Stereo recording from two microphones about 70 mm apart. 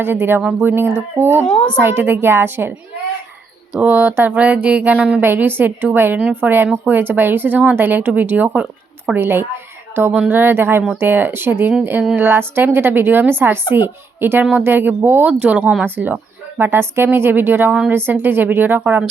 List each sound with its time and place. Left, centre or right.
0.0 s a woman's voice: right
3.8 s speech: right
5.2 s a woman's voice: right
15.3 s speech: centre